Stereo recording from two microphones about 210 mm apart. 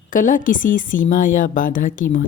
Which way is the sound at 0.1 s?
40° left (ahead or behind).